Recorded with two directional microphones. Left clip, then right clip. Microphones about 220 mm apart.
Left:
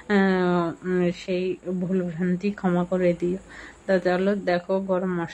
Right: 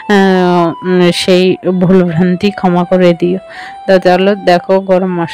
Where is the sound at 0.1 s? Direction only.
40° right (ahead or behind).